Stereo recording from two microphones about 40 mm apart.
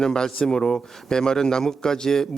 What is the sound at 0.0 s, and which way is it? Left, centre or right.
A man's voice, centre.